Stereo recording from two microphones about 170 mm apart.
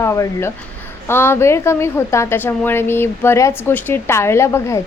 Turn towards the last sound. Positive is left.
turn(degrees=15)  # may be behind; listen again after turning